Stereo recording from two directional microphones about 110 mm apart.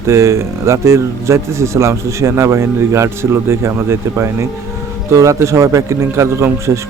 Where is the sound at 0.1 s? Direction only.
25° right (ahead or behind).